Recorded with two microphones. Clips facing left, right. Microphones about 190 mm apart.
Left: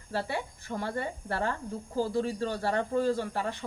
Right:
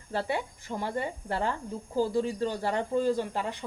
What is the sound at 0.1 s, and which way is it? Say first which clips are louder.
A woman's voice: right 2 dB; 15° right (ahead or behind).